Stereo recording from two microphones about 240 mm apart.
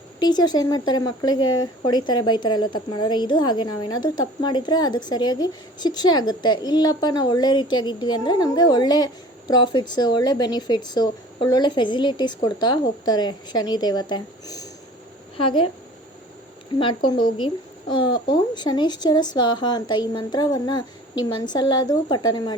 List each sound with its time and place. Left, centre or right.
0.2 s a woman's voice: centre
17.4 s speech: centre